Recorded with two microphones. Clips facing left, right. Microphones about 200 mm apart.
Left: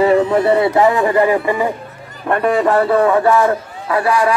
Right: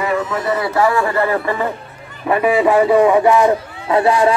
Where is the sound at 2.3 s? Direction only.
5° right (ahead or behind).